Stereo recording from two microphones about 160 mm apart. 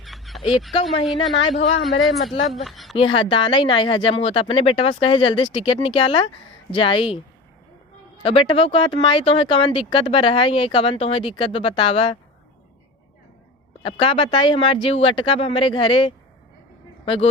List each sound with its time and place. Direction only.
0.0 s a sound: centre (ahead or behind)
1.4 s speech: 35° left (ahead or behind)
1.8 s speech: centre (ahead or behind)
2.9 s speech: 35° left (ahead or behind)
8.2 s speech: 35° left (ahead or behind)
13.8 s speech: 35° left (ahead or behind)